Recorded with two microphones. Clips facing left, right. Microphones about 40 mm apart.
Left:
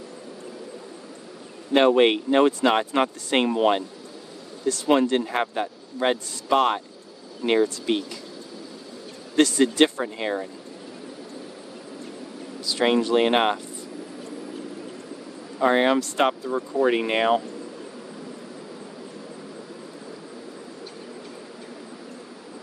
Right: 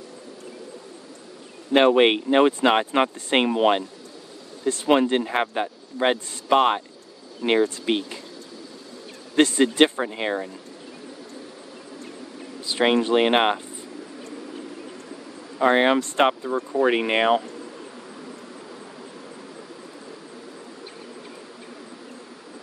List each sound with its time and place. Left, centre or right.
1.7 s speech: right
9.3 s speech: right
12.6 s speech: right
15.6 s speech: right